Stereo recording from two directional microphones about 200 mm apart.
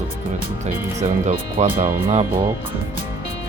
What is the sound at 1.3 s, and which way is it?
Speech, 40° right (ahead or behind).